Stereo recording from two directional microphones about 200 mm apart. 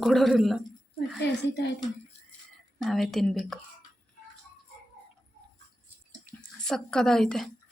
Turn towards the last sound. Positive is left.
turn(degrees=5)  # may be behind; listen again after turning